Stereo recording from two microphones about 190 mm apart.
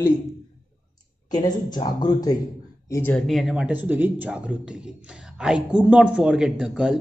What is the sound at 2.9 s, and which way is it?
Speech, 10° left (ahead or behind).